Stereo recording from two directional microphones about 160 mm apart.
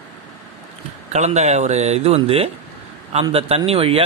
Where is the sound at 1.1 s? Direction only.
45° right (ahead or behind).